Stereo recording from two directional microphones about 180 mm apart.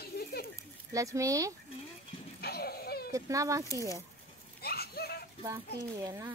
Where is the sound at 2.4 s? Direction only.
60° left (ahead or behind).